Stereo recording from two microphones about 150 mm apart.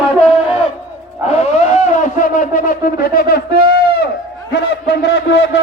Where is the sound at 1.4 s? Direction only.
55° left (ahead or behind); by 4.0 s 90° left.